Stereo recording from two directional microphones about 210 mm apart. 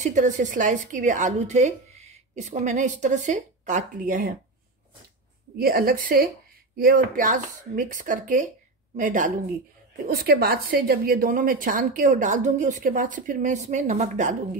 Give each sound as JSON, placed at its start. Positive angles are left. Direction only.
{"t": 0.0, "sound": "a woman's voice", "side_deg": -35}
{"t": 5.6, "sound": "a woman's voice", "side_deg": -45}